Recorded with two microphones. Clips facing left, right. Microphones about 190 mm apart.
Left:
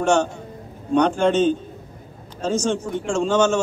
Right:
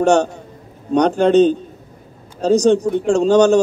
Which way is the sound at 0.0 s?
40° right (ahead or behind).